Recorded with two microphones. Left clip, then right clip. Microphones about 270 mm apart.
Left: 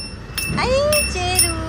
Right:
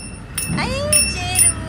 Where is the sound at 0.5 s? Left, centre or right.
Centre.